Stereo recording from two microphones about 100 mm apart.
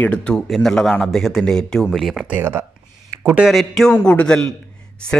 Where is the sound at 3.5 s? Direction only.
Centre (ahead or behind).